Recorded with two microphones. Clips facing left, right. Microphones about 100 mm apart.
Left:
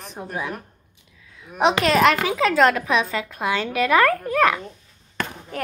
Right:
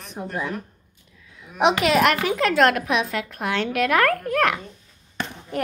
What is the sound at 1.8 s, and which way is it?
A woman's voice, 5° right (ahead or behind).